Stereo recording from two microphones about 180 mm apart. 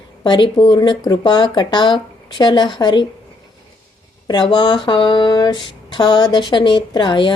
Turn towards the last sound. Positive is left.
turn(degrees=25)  # may be behind; listen again after turning